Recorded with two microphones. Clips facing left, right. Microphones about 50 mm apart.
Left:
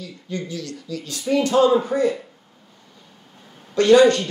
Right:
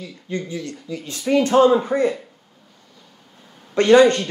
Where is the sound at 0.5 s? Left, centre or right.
Right.